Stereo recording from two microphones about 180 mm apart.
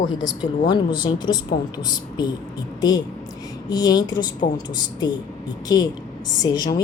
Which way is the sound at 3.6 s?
20° left (ahead or behind).